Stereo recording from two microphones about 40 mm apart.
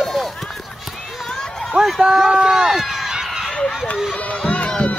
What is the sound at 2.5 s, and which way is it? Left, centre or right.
Speech, centre.